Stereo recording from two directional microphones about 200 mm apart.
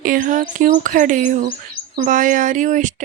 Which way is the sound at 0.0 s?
40° right (ahead or behind).